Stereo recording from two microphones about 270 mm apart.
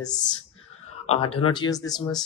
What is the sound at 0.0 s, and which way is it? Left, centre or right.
Speech, centre.